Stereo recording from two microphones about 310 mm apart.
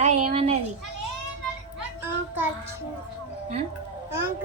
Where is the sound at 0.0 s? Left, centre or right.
Right.